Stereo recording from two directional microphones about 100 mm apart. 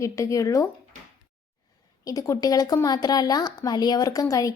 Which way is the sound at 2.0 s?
35° left (ahead or behind).